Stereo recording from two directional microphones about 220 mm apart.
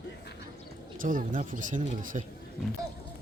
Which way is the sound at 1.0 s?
40° right (ahead or behind).